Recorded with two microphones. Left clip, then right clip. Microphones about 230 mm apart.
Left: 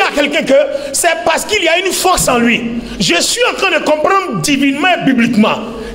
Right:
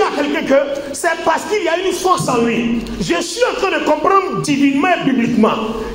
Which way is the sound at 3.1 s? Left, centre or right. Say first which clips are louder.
Left 3 dB; left.